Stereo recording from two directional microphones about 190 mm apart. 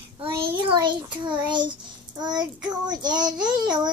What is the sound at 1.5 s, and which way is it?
Child singing, 25° right (ahead or behind).